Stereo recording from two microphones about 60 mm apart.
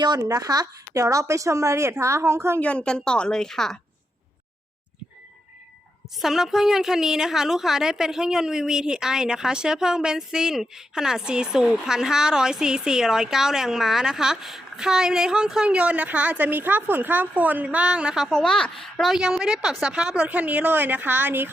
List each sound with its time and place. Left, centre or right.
0.3 s a woman's voice: right
2.6 s a woman's voice: left
6.1 s a woman's voice: centre
18.3 s a woman's voice: centre
19.1 s a woman's voice: centre; by 21.5 s right